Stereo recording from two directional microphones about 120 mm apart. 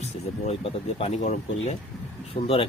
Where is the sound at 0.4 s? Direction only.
65° left (ahead or behind).